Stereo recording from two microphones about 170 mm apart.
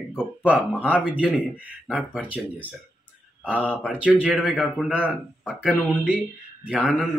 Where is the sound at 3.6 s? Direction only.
10° left (ahead or behind).